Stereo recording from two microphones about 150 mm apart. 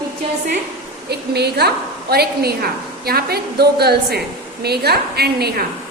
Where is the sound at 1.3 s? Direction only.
90° right.